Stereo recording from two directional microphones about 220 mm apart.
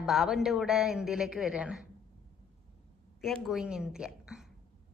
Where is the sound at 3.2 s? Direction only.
Centre (ahead or behind).